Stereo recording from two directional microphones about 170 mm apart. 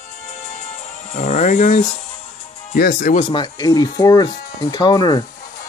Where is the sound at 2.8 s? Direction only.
55° left (ahead or behind).